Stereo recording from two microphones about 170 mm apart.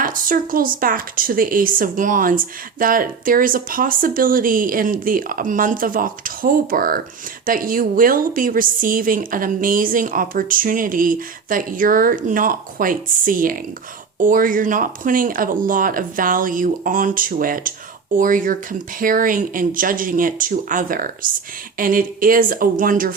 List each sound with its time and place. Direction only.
0.0 s speech: 55° right (ahead or behind)